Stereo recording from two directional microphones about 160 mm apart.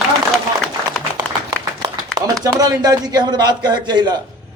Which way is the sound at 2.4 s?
20° right (ahead or behind).